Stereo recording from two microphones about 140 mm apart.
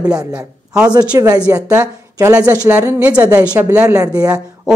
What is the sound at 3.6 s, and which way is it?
Speech, 20° right (ahead or behind).